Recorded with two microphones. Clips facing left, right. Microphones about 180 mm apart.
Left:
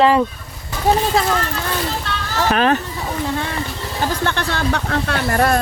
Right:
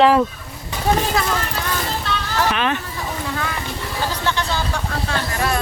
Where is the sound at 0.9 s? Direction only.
25° left (ahead or behind).